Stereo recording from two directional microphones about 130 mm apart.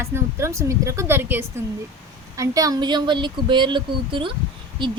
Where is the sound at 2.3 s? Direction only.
25° right (ahead or behind).